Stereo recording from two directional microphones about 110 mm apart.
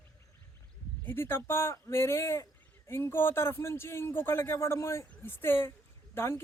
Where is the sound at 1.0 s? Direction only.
20° left (ahead or behind).